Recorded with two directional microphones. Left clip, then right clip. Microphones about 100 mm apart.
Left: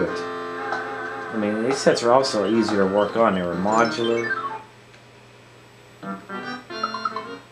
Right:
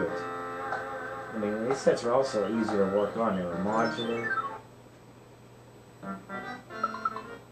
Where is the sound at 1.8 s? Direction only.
20° left (ahead or behind).